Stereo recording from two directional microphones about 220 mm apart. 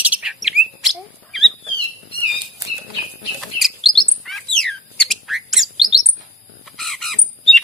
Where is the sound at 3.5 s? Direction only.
Centre (ahead or behind).